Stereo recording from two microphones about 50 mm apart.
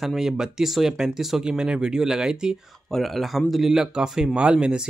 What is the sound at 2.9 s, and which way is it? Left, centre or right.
Speech, centre.